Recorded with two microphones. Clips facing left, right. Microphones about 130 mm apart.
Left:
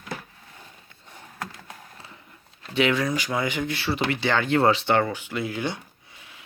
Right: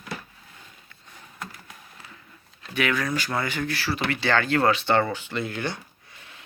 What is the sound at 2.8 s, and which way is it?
Speech, 25° left (ahead or behind).